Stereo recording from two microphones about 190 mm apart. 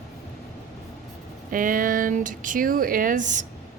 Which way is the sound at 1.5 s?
45° right (ahead or behind).